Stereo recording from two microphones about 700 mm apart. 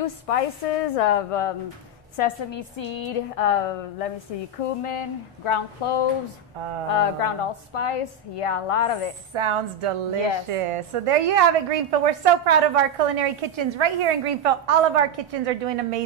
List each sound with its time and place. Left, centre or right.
0.0 s a woman's voice: left
9.3 s a woman's voice: right